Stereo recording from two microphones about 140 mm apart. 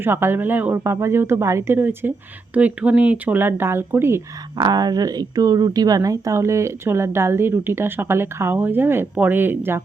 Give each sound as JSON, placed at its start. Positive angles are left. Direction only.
{"t": 0.0, "sound": "speech", "side_deg": -15}
{"t": 4.5, "sound": "speech", "side_deg": -30}